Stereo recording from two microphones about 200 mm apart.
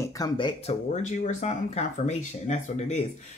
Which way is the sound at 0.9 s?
35° left (ahead or behind).